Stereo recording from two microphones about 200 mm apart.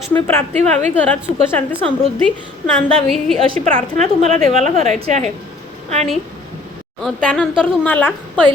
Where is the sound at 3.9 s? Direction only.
35° right (ahead or behind).